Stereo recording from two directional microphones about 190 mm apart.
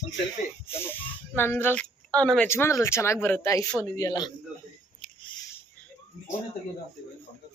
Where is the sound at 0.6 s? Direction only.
10° left (ahead or behind).